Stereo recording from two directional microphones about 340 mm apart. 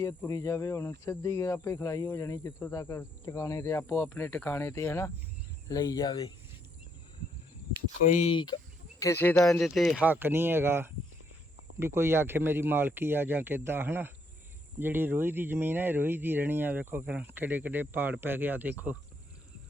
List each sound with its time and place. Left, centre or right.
0.0 s speech: centre
8.0 s speech: left; by 18.9 s centre